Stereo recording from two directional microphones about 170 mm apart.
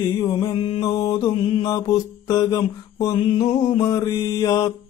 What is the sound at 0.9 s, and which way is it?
Mantra, 20° left (ahead or behind).